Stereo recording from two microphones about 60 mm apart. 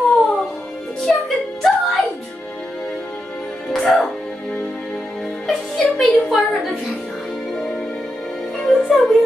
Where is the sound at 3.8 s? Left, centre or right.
Centre.